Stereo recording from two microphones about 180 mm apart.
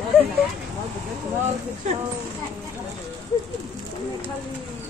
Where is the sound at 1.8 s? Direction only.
40° right (ahead or behind).